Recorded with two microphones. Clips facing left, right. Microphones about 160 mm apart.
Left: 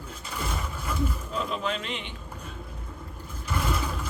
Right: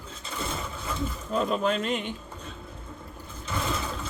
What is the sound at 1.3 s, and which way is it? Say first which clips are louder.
Speech: right 10 dB; 45° right (ahead or behind).